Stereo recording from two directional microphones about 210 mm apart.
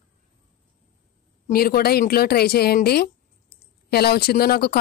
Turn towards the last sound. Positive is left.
turn(degrees=50)  # may be behind; listen again after turning